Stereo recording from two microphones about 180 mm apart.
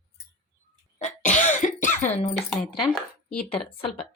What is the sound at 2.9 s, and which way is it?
Speech, 5° left (ahead or behind).